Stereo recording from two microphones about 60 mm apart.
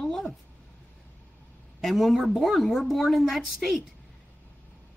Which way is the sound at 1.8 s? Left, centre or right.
Centre.